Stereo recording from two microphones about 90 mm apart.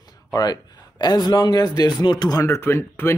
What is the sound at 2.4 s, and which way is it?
Speech, 30° left (ahead or behind).